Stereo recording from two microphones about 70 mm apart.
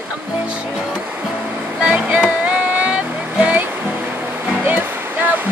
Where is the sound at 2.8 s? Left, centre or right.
Centre.